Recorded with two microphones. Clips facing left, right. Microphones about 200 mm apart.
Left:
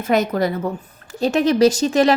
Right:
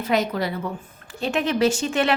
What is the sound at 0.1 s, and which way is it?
A woman's voice, 45° left (ahead or behind).